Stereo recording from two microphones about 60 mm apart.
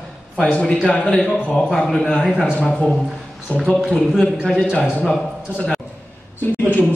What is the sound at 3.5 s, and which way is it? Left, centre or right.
Speech, left.